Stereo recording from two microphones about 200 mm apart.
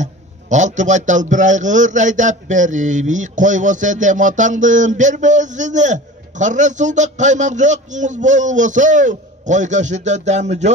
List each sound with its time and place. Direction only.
0.0 s a man's voice: 35° right (ahead or behind)